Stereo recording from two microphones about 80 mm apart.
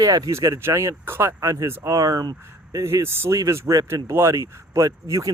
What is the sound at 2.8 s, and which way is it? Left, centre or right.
Speech, right.